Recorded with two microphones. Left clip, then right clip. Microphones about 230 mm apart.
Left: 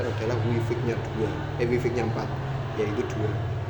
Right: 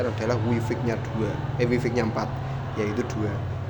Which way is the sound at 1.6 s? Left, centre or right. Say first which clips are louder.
Right 1 dB; right.